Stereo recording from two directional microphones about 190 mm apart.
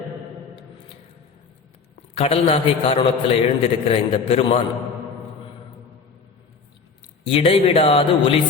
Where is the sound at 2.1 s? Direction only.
30° left (ahead or behind).